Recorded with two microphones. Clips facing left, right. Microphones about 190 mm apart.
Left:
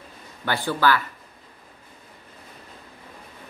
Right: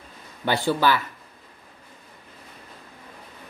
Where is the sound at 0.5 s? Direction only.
15° right (ahead or behind).